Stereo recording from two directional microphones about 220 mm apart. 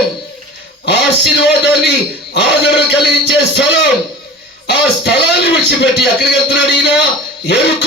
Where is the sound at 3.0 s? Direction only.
50° left (ahead or behind).